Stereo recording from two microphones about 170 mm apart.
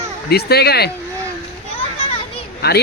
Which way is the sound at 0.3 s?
70° left (ahead or behind).